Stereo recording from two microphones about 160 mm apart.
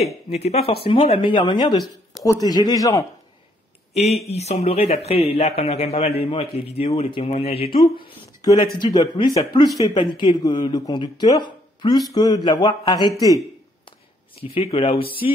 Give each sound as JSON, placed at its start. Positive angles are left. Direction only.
{"t": 0.3, "sound": "a man's voice", "side_deg": 40}
{"t": 3.9, "sound": "a man's voice", "side_deg": 40}
{"t": 14.4, "sound": "a man's voice", "side_deg": 35}